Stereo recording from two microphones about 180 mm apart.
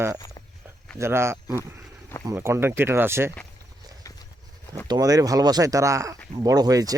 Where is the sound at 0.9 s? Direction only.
15° right (ahead or behind).